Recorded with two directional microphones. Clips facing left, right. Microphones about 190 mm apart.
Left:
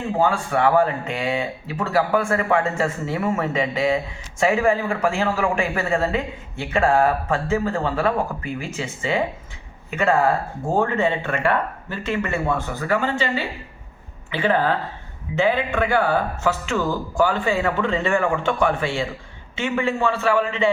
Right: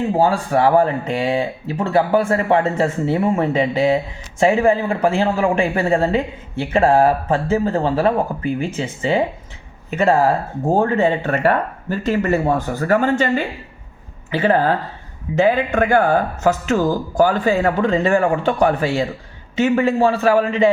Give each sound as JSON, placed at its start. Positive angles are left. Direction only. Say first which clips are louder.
{"t": 0.2, "sound": "speech", "louder": "right 3 dB", "side_deg": -35}